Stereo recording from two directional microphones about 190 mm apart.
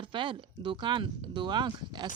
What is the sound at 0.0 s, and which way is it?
Speech, 25° right (ahead or behind).